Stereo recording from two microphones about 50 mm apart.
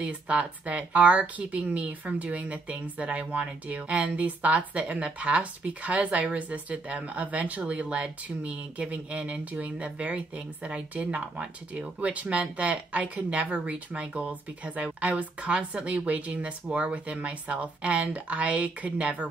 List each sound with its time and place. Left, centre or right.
0.0 s speech: right